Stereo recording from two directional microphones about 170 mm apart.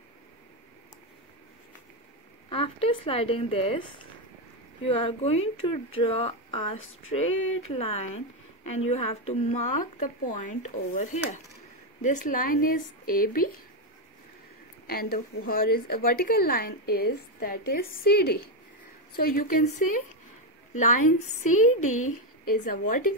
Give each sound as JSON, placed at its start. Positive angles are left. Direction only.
{"t": 2.5, "sound": "speech", "side_deg": 30}
{"t": 4.8, "sound": "a woman's voice", "side_deg": 35}
{"t": 14.9, "sound": "a woman's voice", "side_deg": 60}